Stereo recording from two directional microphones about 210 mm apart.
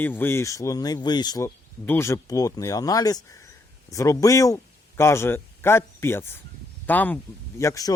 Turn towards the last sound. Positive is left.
turn(degrees=15)  # may be behind; listen again after turning